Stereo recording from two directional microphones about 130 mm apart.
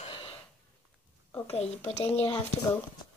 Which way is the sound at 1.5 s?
55° left (ahead or behind).